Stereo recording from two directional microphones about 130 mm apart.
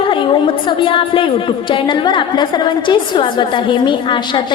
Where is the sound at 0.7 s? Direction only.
40° left (ahead or behind).